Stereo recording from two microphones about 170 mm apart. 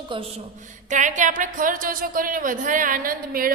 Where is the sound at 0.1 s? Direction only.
30° right (ahead or behind).